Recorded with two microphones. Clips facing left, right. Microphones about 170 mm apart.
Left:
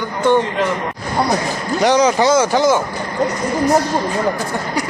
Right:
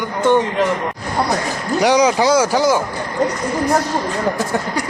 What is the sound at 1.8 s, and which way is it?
Speech, 10° right (ahead or behind).